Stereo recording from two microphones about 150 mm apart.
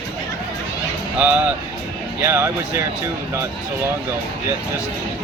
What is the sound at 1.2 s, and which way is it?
Speech, 10° right (ahead or behind).